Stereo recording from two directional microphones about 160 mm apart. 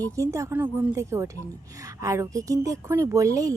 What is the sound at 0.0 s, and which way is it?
A child's voice, 20° right (ahead or behind).